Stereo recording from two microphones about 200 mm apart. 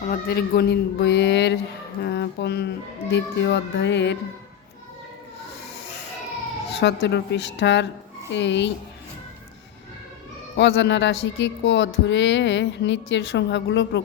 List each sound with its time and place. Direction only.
0.0 s speech: 50° left (ahead or behind)
6.7 s speech: 60° left (ahead or behind)
10.6 s speech: 60° left (ahead or behind)